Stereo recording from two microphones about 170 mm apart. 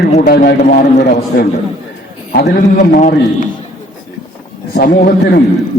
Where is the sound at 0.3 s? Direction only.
65° left (ahead or behind).